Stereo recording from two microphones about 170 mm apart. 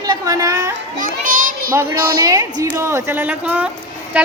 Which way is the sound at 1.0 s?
55° right (ahead or behind).